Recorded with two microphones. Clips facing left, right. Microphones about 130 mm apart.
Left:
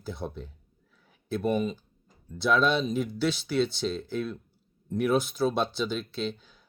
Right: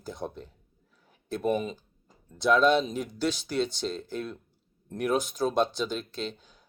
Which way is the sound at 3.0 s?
45° right (ahead or behind).